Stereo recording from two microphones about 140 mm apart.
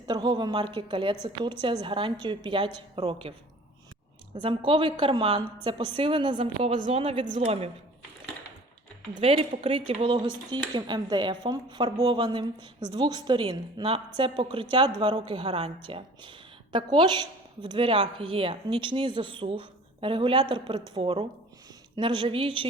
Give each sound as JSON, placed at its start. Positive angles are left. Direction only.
{"t": 0.1, "sound": "speech", "side_deg": -30}
{"t": 4.4, "sound": "speech", "side_deg": -40}
{"t": 6.7, "sound": "a woman's voice", "side_deg": -60}
{"t": 7.0, "sound": "speech", "side_deg": -45}
{"t": 9.2, "sound": "speech", "side_deg": -45}